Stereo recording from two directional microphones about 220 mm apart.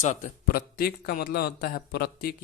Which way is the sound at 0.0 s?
35° left (ahead or behind).